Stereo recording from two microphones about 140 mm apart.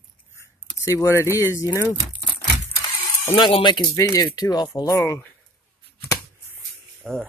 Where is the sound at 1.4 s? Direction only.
20° left (ahead or behind).